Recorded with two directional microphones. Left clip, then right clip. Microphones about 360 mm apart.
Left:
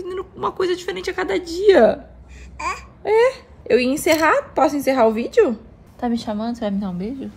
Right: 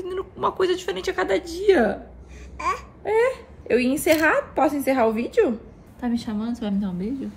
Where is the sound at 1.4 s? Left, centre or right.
Centre.